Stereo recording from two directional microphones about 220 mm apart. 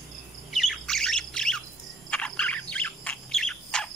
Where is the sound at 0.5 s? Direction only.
Centre (ahead or behind).